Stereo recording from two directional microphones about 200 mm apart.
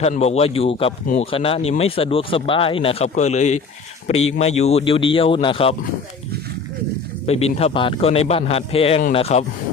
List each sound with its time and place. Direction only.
0.0 s speech: 30° left (ahead or behind)
7.3 s speech: 30° left (ahead or behind)